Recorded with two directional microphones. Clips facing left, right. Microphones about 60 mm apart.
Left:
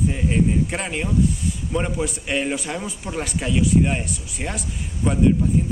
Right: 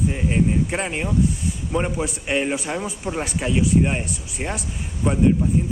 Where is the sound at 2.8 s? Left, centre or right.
Right.